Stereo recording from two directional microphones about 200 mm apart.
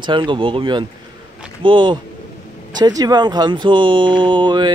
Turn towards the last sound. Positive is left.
turn(degrees=-20)  # may be behind; listen again after turning